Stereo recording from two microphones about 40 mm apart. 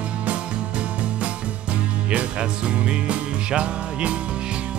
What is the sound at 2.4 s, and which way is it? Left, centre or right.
Music, right.